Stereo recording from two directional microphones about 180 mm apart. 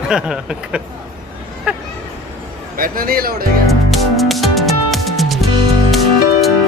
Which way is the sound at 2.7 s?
55° right (ahead or behind).